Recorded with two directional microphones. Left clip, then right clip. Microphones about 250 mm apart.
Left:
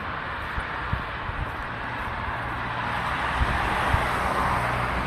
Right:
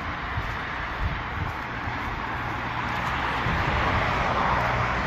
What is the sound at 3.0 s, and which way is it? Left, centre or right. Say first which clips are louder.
Vehicle: even; left.